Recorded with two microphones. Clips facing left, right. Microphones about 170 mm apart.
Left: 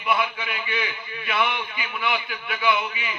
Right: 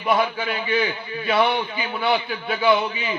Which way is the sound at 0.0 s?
40° right (ahead or behind).